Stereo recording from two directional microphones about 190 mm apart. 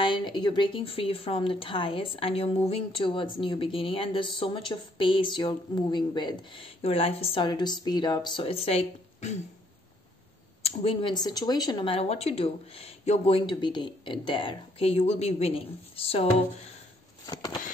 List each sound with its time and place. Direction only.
0.0 s speech: 25° left (ahead or behind)
10.6 s speech: 30° left (ahead or behind)